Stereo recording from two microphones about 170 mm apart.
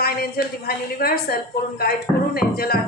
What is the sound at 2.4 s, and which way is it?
Speech, 65° left (ahead or behind).